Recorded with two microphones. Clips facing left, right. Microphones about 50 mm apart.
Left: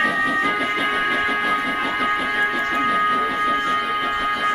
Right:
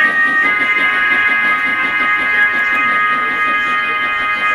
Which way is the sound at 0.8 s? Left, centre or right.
Right.